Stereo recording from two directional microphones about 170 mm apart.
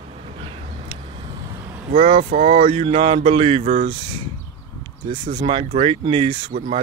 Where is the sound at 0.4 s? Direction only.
30° right (ahead or behind).